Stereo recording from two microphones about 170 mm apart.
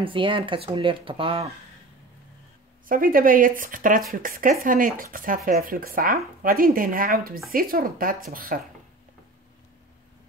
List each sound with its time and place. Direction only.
0.0 s speech: 30° right (ahead or behind)
2.9 s speech: 55° right (ahead or behind)